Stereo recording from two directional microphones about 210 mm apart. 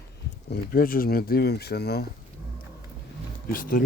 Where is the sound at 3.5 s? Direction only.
40° left (ahead or behind).